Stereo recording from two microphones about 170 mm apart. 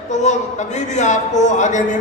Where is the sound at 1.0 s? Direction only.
45° left (ahead or behind).